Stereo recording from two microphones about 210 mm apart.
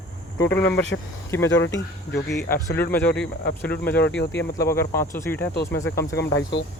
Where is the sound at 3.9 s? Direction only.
55° left (ahead or behind).